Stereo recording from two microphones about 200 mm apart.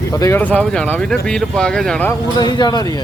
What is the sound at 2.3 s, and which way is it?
Speech, 20° left (ahead or behind).